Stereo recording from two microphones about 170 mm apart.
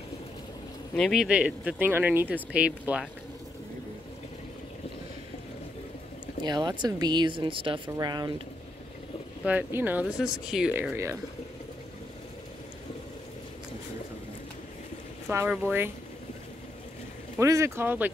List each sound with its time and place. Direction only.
0.9 s speech: centre (ahead or behind)
6.4 s speech: 25° right (ahead or behind)
9.4 s speech: 10° right (ahead or behind)
15.2 s speech: 10° right (ahead or behind)
17.4 s speech: 15° right (ahead or behind)